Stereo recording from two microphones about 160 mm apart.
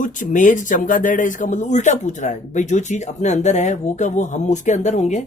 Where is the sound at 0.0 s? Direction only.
55° left (ahead or behind).